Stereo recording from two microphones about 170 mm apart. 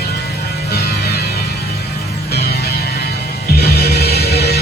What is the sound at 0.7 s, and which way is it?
Music, 65° left (ahead or behind).